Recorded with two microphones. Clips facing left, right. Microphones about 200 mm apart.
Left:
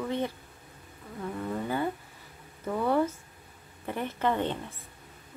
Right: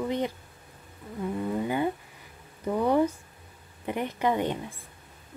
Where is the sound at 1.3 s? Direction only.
15° right (ahead or behind).